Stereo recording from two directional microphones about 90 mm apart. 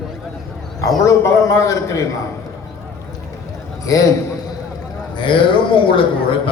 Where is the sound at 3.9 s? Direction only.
40° left (ahead or behind).